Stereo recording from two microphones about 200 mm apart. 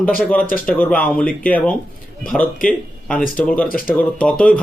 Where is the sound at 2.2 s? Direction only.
40° left (ahead or behind).